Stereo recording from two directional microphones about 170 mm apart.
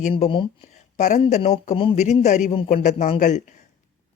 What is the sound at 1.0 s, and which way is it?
Speech, 45° left (ahead or behind).